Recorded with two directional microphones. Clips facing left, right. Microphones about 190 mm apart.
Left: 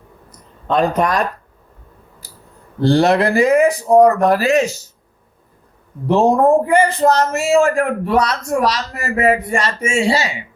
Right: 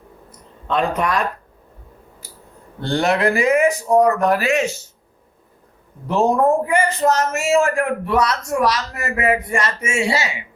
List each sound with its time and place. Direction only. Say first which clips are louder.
0.3 s a sound: left 4 dB; 40° left (ahead or behind)
2.8 s a man's voice: left 5 dB; 35° left (ahead or behind)
6.1 s a man's voice: left 4 dB; 30° left (ahead or behind)